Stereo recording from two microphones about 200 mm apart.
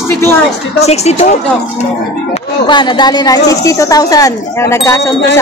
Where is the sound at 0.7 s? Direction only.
30° left (ahead or behind).